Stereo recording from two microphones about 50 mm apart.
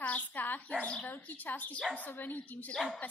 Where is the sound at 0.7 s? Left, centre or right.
Left.